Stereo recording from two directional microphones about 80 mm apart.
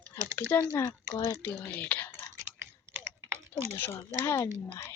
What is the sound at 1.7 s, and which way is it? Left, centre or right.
Whispering, left.